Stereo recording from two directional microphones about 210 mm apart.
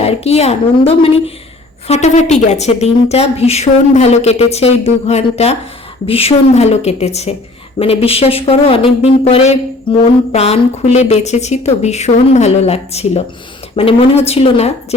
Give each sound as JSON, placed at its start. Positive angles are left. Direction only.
{"t": 0.0, "sound": "a woman's voice", "side_deg": 30}